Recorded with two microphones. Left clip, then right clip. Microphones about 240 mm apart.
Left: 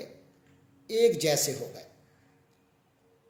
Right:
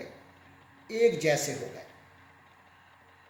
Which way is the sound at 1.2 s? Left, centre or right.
Left.